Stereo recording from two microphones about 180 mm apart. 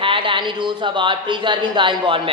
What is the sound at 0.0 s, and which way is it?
A man's voice, 30° right (ahead or behind).